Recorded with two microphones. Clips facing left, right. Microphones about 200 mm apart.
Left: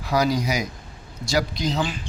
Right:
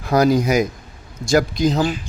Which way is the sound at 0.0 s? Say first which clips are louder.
Right 6 dB; 50° right (ahead or behind).